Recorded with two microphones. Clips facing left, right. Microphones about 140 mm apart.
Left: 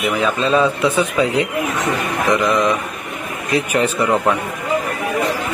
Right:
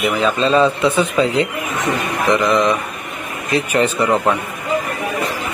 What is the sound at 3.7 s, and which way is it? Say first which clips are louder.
Speech: right 2 dB; 10° left (ahead or behind).